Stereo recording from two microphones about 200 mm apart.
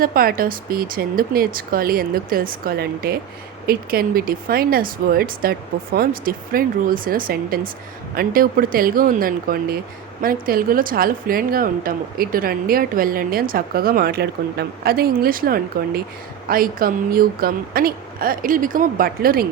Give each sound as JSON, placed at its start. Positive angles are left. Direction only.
{"t": 0.0, "sound": "a woman's voice", "side_deg": -45}